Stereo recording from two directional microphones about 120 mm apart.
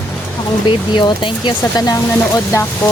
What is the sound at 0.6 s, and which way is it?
Speech, 40° left (ahead or behind).